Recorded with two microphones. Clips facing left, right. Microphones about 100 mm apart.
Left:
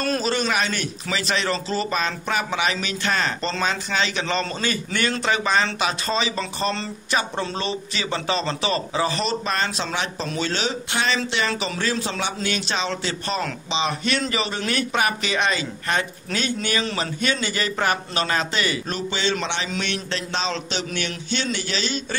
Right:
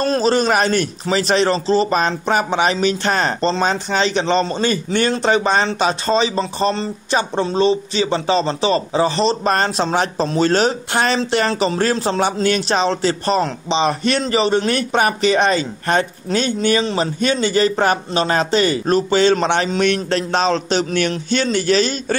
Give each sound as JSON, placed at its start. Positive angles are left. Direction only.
{"t": 0.0, "sound": "a man's voice", "side_deg": -30}